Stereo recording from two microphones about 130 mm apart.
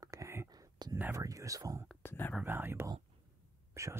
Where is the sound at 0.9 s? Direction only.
15° right (ahead or behind).